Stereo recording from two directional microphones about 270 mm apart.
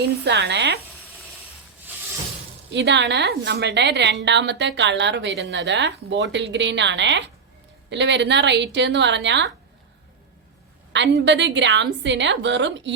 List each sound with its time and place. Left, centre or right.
0.3 s a woman's voice: right
2.7 s a woman's voice: right
10.9 s a woman's voice: right